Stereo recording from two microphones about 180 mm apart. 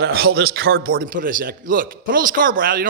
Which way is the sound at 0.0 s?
60° right (ahead or behind).